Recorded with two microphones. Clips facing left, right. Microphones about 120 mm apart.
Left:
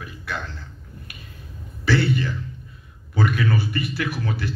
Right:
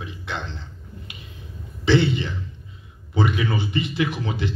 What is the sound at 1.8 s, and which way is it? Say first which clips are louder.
Speech: right 2 dB; 20° right (ahead or behind).